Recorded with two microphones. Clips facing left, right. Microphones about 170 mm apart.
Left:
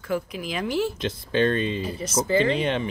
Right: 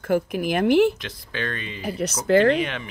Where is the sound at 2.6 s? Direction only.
30° left (ahead or behind).